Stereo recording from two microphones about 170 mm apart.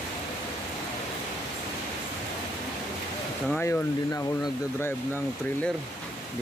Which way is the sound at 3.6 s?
15° left (ahead or behind).